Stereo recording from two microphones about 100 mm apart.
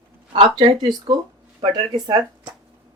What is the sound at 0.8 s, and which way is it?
Speech, 45° right (ahead or behind).